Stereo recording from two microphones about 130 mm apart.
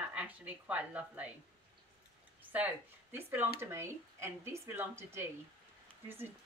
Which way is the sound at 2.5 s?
15° right (ahead or behind).